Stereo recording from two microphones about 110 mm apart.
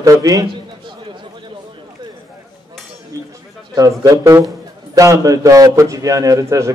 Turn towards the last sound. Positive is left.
turn(degrees=-30)  # may be behind; listen again after turning